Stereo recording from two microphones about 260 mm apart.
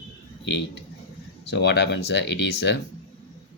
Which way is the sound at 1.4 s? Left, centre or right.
Left.